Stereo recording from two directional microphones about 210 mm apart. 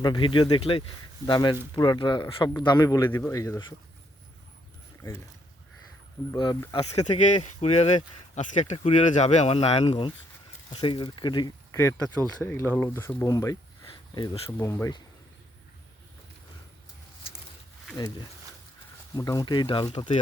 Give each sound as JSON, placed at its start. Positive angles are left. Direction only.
{"t": 0.0, "sound": "a man's voice", "side_deg": 20}
{"t": 6.3, "sound": "speech", "side_deg": 20}
{"t": 6.9, "sound": "a man's voice", "side_deg": 35}
{"t": 17.9, "sound": "a man's voice", "side_deg": 20}